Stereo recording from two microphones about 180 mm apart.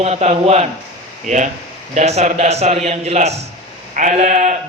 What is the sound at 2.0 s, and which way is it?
A man's voice, 40° right (ahead or behind).